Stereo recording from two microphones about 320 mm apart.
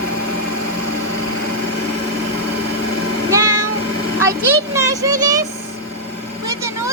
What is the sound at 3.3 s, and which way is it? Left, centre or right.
Meow, centre.